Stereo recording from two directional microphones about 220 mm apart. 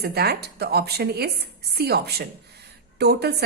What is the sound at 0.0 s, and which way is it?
A woman's voice, 45° right (ahead or behind).